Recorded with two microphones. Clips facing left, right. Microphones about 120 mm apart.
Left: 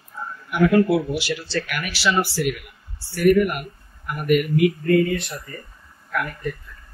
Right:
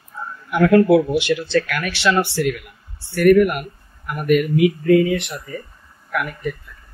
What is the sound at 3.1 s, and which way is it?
Speech, 90° right.